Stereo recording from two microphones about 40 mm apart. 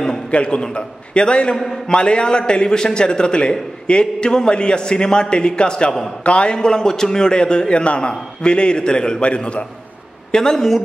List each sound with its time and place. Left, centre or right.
0.3 s a man's voice: left
10.3 s speech: centre